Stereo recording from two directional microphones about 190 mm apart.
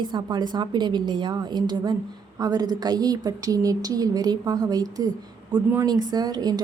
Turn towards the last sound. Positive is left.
turn(degrees=-20)  # may be behind; listen again after turning